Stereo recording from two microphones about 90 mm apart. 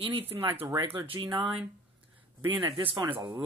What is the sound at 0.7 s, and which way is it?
Speech, 75° right (ahead or behind).